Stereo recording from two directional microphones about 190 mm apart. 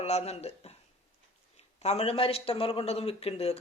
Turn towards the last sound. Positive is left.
turn(degrees=30)  # may be behind; listen again after turning